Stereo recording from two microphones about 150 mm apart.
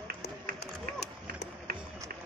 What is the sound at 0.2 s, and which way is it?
Run, 90° left.